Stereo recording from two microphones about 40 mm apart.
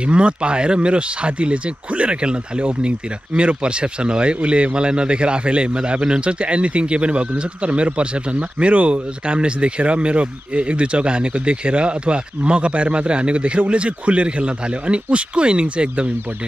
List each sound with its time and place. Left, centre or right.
0.0 s speech: right